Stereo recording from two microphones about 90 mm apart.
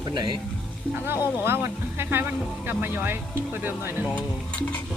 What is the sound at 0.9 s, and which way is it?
Speech, 25° right (ahead or behind).